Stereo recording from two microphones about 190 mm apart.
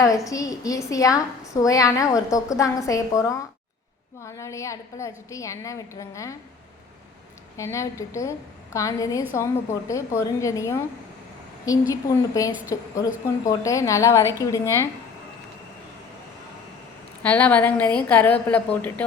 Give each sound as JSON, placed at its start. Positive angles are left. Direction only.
{"t": 0.3, "sound": "a woman's voice", "side_deg": 20}
{"t": 7.5, "sound": "a woman's voice", "side_deg": 15}
{"t": 17.2, "sound": "a woman's voice", "side_deg": 10}